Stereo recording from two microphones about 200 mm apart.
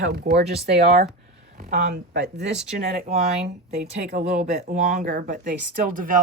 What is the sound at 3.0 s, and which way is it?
Speech, 35° right (ahead or behind).